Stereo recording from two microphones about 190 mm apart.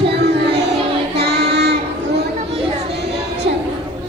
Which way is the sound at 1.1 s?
60° right (ahead or behind).